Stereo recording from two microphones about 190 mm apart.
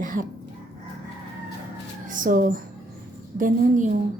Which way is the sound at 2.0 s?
45° right (ahead or behind).